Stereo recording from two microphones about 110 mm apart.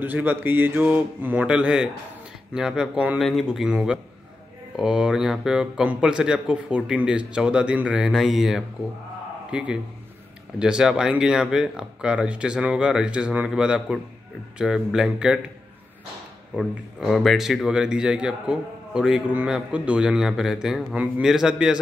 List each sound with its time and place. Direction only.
0.0 s speech: 15° right (ahead or behind)
16.5 s speech: centre (ahead or behind)